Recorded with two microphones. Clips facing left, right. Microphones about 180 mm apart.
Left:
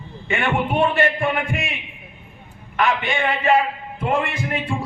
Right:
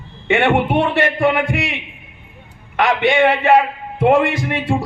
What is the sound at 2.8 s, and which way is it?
A man's voice, 75° right (ahead or behind).